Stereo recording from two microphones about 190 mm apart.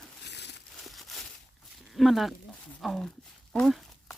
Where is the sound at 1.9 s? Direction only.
Centre (ahead or behind).